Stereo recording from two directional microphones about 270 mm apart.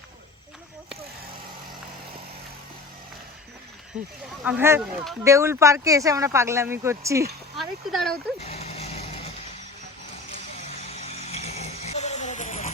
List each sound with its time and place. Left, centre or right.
4.4 s speech: centre
7.5 s speech: centre
8.4 s vehicle: left
10.8 s a sound: left